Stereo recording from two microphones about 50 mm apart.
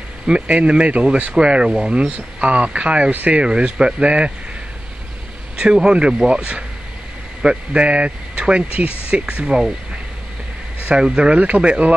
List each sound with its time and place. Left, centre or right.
0.3 s speech: right
3.1 s speech: right
3.3 s speech: centre
5.6 s speech: centre
10.8 s speech: right